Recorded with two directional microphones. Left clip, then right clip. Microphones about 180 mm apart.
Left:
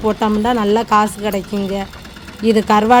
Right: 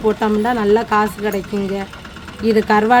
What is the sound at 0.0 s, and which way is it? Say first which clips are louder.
Speech: even; 15° left (ahead or behind).